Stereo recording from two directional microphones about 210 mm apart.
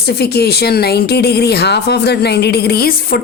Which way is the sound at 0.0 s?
50° left (ahead or behind).